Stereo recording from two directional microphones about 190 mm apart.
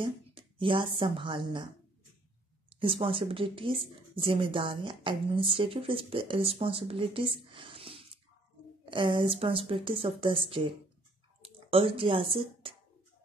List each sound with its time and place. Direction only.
0.0 s a woman's voice: 25° right (ahead or behind)
2.8 s speech: 30° right (ahead or behind)